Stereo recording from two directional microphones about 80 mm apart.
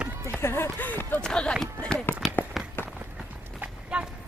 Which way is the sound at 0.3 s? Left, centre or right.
Left.